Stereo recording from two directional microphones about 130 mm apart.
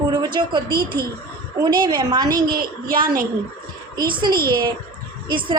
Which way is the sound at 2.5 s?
90° right.